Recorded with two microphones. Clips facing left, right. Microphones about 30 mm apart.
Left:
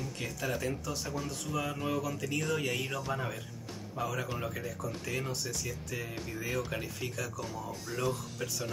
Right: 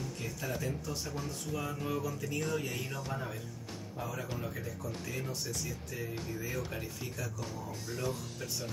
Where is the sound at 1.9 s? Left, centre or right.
Left.